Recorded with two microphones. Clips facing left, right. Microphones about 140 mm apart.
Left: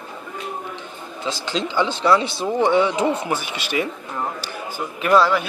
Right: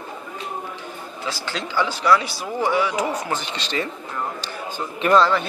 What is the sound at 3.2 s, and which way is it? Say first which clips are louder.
A man's voice: left 2 dB; 10° left (ahead or behind).